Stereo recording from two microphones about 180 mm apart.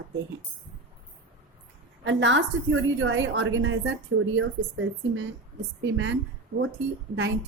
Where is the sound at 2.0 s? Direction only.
90° right.